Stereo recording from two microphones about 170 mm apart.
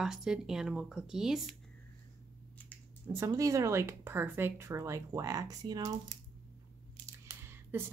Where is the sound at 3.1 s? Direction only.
20° right (ahead or behind).